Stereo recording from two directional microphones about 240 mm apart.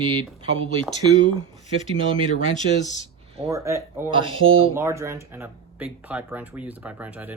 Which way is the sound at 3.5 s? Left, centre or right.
Centre.